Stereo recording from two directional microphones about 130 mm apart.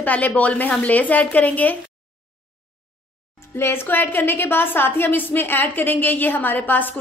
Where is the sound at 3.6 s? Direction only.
15° left (ahead or behind).